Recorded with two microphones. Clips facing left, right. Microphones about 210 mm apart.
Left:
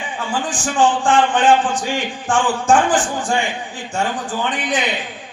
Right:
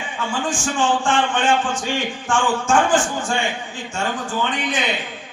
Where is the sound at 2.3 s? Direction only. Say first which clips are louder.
Left 2 dB; 15° left (ahead or behind).